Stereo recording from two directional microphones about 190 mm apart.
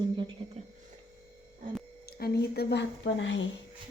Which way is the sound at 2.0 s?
55° left (ahead or behind).